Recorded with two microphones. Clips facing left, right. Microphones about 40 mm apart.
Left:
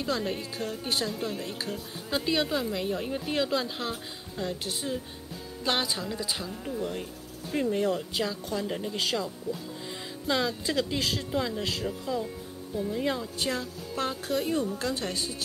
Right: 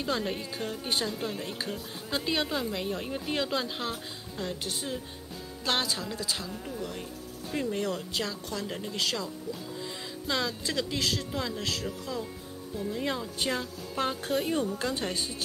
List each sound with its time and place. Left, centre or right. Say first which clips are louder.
0.0 s a woman's voice: left 1 dB; centre
5.6 s a woman's voice: left 1 dB; centre
6.8 s speech: left 3 dB; centre
8.6 s a woman's voice: left 4 dB; centre
8.9 s speech: right 1 dB; centre
12.7 s a woman's voice: left 3 dB; centre
13.4 s music: even; centre